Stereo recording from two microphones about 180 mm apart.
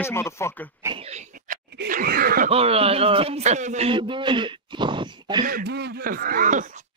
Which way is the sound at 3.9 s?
25° right (ahead or behind).